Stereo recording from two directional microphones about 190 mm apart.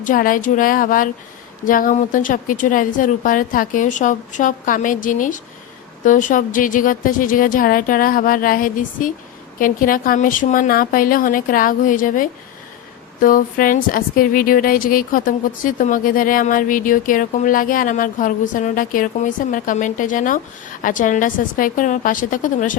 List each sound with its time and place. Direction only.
0.0 s speech: 45° left (ahead or behind)